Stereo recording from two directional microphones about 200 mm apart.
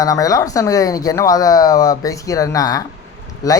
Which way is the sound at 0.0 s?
15° left (ahead or behind).